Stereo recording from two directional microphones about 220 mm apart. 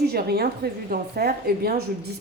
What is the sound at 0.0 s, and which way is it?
A woman's voice, 45° right (ahead or behind).